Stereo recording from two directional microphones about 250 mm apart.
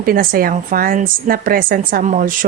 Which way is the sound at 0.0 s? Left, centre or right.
Right.